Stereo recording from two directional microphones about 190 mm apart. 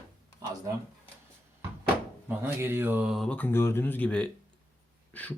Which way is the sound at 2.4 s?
15° right (ahead or behind).